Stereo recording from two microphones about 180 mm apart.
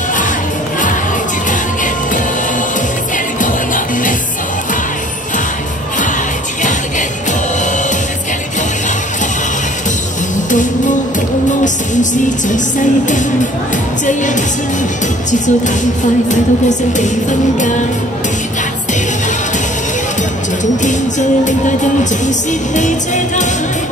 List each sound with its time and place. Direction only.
3.3 s music: 45° left (ahead or behind)
10.5 s music: 45° left (ahead or behind)
22.2 s music: 40° left (ahead or behind)